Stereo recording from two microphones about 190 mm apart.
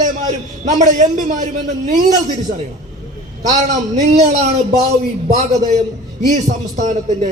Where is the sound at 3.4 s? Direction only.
40° right (ahead or behind).